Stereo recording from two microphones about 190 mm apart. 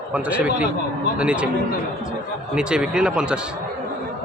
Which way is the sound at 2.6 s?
5° right (ahead or behind).